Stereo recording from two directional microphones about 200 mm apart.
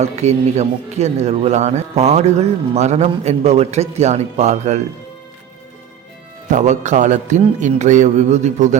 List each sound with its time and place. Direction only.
0.0 s a man's voice: 35° right (ahead or behind)
6.5 s a man's voice: 35° right (ahead or behind)